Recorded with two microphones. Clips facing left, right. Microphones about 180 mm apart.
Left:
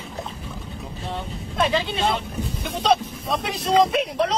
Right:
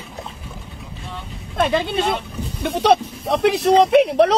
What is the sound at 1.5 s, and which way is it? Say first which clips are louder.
Speech: right 4 dB; 55° right (ahead or behind).